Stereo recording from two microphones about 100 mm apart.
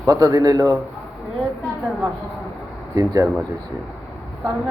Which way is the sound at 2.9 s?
30° right (ahead or behind).